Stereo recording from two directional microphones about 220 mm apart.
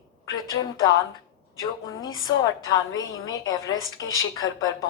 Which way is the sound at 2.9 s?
15° left (ahead or behind).